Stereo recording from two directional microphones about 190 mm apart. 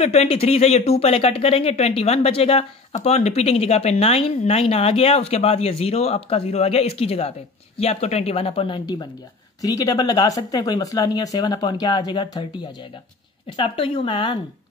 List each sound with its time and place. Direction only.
0.0 s speech: 35° left (ahead or behind)